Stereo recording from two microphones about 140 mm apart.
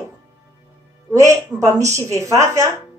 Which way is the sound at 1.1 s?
25° right (ahead or behind).